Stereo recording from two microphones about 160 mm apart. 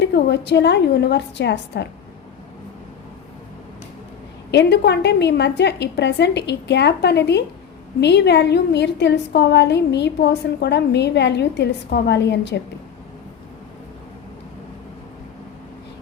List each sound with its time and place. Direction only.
0.0 s a woman's voice: 90° left
4.5 s a woman's voice: 90° left